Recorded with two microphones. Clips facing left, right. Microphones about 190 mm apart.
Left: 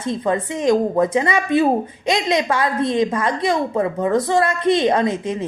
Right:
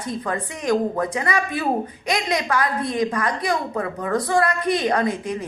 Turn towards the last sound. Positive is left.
turn(degrees=25)  # may be behind; listen again after turning